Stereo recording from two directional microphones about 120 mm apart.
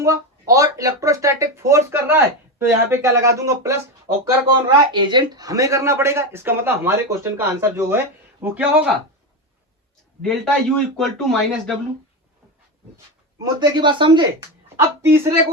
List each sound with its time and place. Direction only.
0.0 s speech: 25° right (ahead or behind)
4.9 s speech: 40° right (ahead or behind); by 8.9 s 10° right (ahead or behind)
10.2 s a man's voice: 5° left (ahead or behind)
13.4 s speech: 40° right (ahead or behind)
14.8 s speech: 25° right (ahead or behind)